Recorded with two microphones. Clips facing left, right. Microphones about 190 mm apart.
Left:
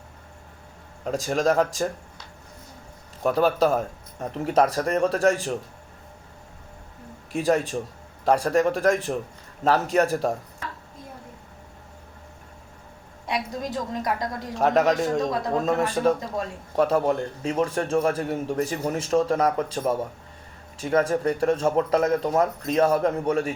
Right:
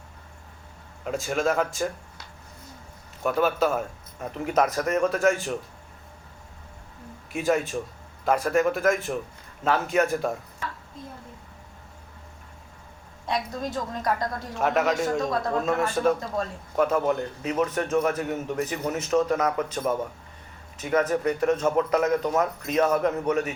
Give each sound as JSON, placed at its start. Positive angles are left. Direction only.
{"t": 1.0, "sound": "a man's voice", "side_deg": 35}
{"t": 3.2, "sound": "a man's voice", "side_deg": 35}
{"t": 7.3, "sound": "a man's voice", "side_deg": 35}
{"t": 13.2, "sound": "a woman's voice", "side_deg": 15}
{"t": 14.5, "sound": "a man's voice", "side_deg": 35}